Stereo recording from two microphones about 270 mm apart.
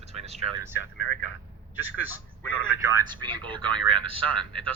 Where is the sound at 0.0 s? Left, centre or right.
Right.